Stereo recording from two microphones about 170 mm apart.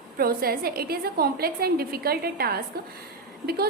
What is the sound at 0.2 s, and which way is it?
A woman's voice, 60° right (ahead or behind).